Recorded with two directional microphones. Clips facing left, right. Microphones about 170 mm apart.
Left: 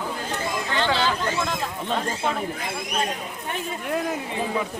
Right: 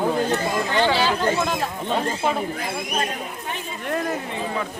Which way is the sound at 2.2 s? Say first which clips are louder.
Right 3 dB; 5° right (ahead or behind).